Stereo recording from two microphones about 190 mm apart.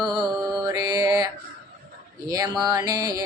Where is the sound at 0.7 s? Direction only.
20° right (ahead or behind).